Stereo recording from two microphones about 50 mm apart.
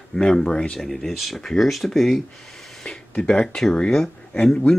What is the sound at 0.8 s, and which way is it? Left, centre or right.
Speech, centre.